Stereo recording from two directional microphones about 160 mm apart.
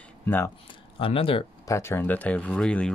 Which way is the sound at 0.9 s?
35° left (ahead or behind).